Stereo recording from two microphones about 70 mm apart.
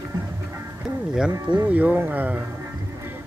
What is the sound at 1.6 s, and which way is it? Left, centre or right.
Speech, right.